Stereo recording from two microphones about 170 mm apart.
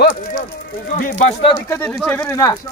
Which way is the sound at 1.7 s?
10° left (ahead or behind).